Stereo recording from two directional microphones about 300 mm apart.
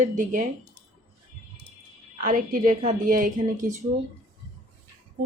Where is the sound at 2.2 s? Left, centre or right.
Right.